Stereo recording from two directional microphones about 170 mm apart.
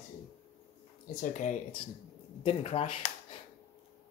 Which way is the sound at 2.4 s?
35° left (ahead or behind).